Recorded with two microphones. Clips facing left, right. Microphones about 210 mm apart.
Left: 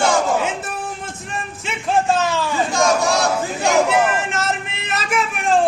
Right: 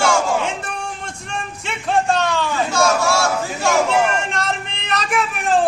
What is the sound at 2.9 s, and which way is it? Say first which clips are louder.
Battle cry: even; 15° left (ahead or behind).